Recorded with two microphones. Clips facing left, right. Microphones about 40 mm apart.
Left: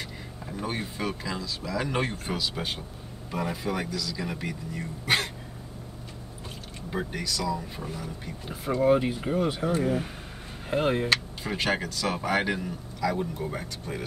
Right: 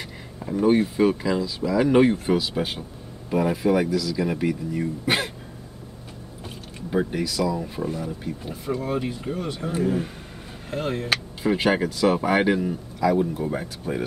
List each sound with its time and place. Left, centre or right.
0.0 s speech: centre
7.1 s speech: centre
8.5 s speech: centre
11.1 s speech: centre